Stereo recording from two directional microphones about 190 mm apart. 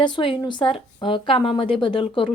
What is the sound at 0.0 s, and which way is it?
A woman's voice, 25° left (ahead or behind).